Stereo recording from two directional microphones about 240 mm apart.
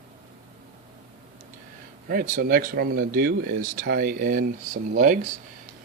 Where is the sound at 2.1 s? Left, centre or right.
Right.